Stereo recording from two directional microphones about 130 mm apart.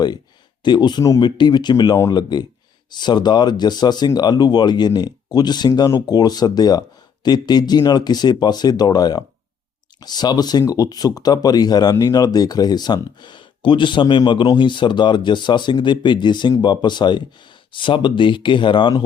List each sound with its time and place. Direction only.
0.6 s speech: 35° left (ahead or behind)